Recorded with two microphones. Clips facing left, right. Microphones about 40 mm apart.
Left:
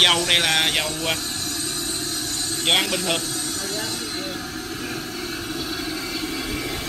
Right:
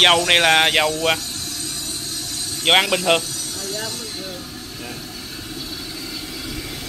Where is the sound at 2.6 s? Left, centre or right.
Right.